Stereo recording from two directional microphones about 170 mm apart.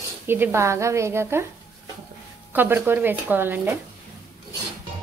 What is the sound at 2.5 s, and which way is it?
A woman's voice, 10° right (ahead or behind).